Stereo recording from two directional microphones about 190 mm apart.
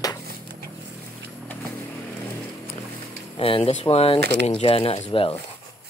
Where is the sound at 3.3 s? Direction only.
30° left (ahead or behind).